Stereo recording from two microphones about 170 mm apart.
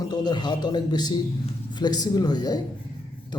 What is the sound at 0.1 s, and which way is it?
A man's voice, 25° left (ahead or behind).